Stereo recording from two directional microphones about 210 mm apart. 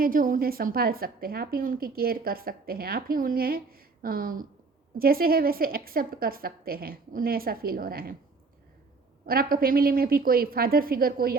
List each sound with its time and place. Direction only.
0.0 s a woman's voice: 40° right (ahead or behind)
9.2 s a woman's voice: 45° right (ahead or behind)